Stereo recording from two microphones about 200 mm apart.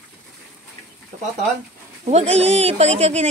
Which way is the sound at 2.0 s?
30° right (ahead or behind).